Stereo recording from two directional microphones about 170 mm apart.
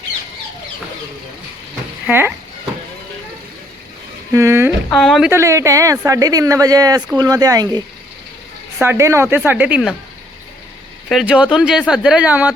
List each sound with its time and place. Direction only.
2.0 s speech: 15° right (ahead or behind)
4.3 s speech: 15° right (ahead or behind)
4.9 s speech: centre (ahead or behind)
5.3 s speech: 15° right (ahead or behind)
8.8 s speech: 15° right (ahead or behind)
11.1 s speech: 5° right (ahead or behind)